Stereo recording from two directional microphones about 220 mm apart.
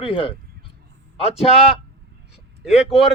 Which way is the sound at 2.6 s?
Centre (ahead or behind).